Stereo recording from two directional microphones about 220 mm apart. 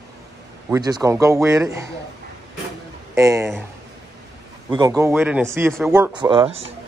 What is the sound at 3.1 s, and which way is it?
Speech, 15° right (ahead or behind).